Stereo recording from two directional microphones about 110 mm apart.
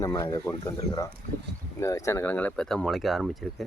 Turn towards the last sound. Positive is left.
turn(degrees=0)  # may be behind; listen again after turning